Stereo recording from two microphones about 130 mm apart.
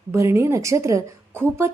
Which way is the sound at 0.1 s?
20° right (ahead or behind).